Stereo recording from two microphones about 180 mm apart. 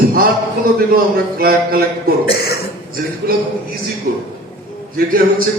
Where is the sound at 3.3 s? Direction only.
55° right (ahead or behind).